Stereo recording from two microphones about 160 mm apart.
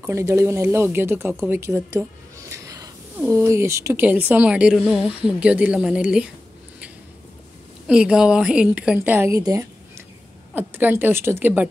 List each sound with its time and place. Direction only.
0.0 s speech: 15° right (ahead or behind)
7.9 s a woman's voice: 5° right (ahead or behind)